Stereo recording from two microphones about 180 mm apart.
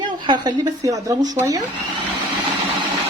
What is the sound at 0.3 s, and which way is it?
Speech, 20° right (ahead or behind).